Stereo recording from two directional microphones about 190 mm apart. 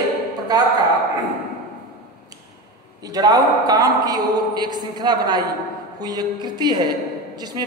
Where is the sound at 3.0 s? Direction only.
20° right (ahead or behind).